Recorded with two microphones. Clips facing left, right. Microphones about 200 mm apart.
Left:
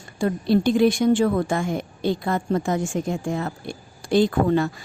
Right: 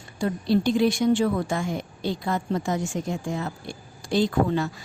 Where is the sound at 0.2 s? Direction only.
50° left (ahead or behind).